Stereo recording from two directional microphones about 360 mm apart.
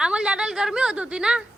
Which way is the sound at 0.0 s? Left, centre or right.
Centre.